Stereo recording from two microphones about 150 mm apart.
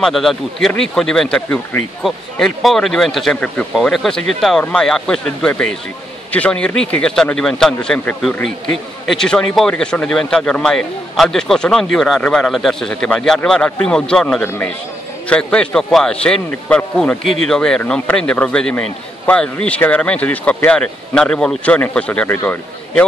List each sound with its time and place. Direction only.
0.0 s a man's voice: centre (ahead or behind)